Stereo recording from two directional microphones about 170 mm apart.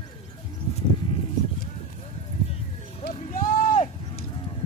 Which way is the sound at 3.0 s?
55° left (ahead or behind).